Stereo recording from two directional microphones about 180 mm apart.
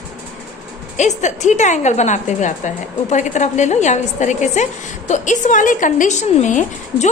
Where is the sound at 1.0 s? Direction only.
40° left (ahead or behind).